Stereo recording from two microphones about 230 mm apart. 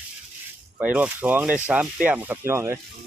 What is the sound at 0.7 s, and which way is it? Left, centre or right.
Speech, centre.